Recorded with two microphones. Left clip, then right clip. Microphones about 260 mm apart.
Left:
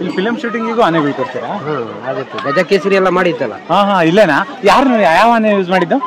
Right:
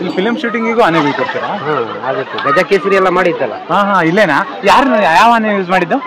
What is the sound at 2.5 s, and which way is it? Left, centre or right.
Speech, centre.